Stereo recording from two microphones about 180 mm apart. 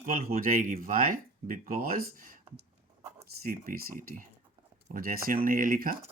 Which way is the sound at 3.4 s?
55° right (ahead or behind).